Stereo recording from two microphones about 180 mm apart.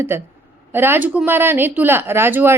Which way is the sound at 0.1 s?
15° right (ahead or behind).